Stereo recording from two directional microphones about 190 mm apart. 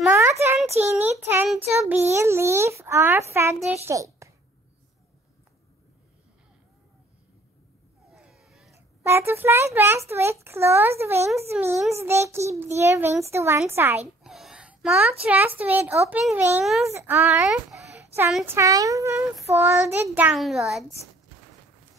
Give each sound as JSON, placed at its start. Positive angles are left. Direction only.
{"t": 0.1, "sound": "a sound", "side_deg": -15}
{"t": 0.7, "sound": "child singing", "side_deg": -10}
{"t": 1.8, "sound": "a child's voice", "side_deg": -15}
{"t": 8.1, "sound": "cat", "side_deg": 0}
{"t": 8.7, "sound": "a child's voice", "side_deg": -15}
{"t": 11.5, "sound": "child singing", "side_deg": -5}
{"t": 11.9, "sound": "a child's voice", "side_deg": -15}
{"t": 14.2, "sound": "a sound", "side_deg": 0}
{"t": 15.2, "sound": "a child's voice", "side_deg": -10}
{"t": 16.8, "sound": "a child's voice", "side_deg": -10}
{"t": 19.5, "sound": "child singing", "side_deg": -15}